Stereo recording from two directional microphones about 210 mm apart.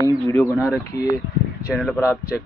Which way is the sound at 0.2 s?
15° left (ahead or behind).